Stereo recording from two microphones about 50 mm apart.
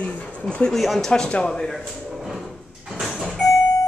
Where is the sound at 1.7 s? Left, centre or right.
Centre.